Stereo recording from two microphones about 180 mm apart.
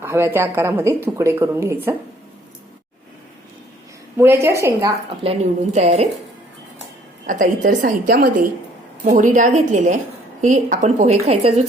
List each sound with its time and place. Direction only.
0.0 s a woman's voice: 15° right (ahead or behind)
4.2 s a woman's voice: 15° right (ahead or behind)
5.2 s speech: 35° right (ahead or behind)
7.3 s a woman's voice: 45° right (ahead or behind)